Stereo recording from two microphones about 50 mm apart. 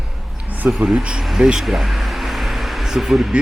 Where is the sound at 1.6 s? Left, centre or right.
Centre.